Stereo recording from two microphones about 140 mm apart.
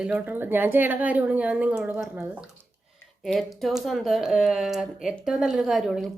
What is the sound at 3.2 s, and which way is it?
Speech, centre (ahead or behind).